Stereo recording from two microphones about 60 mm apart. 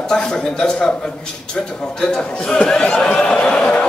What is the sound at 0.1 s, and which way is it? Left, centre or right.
Speech, centre.